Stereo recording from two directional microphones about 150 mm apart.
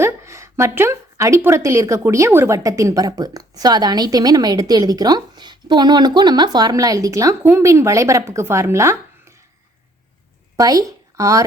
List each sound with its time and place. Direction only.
0.0 s a woman's voice: 20° right (ahead or behind)
10.6 s a woman's voice: 25° right (ahead or behind)